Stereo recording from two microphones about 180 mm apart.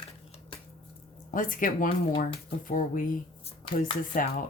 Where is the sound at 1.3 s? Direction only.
50° left (ahead or behind).